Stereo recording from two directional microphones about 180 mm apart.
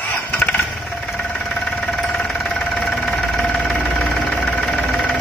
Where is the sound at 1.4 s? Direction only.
Centre (ahead or behind).